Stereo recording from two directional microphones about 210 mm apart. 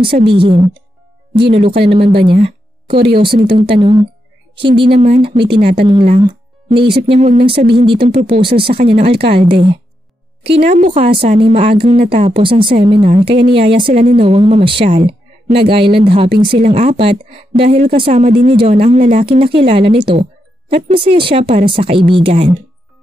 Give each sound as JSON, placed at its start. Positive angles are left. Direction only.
{"t": 0.0, "sound": "speech", "side_deg": -25}